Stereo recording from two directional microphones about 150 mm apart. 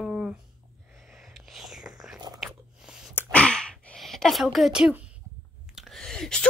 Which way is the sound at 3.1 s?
10° left (ahead or behind).